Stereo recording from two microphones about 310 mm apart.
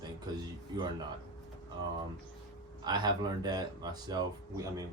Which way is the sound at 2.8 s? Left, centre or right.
Centre.